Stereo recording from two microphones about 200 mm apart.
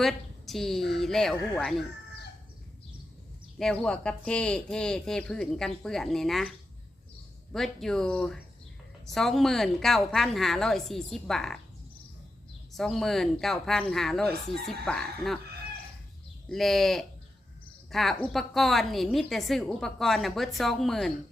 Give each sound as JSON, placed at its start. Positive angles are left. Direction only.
{"t": 0.0, "sound": "a woman's voice", "side_deg": 0}
{"t": 3.6, "sound": "a woman's voice", "side_deg": 5}
{"t": 7.5, "sound": "a woman's voice", "side_deg": 0}
{"t": 12.7, "sound": "a woman's voice", "side_deg": 0}
{"t": 16.5, "sound": "a woman's voice", "side_deg": 0}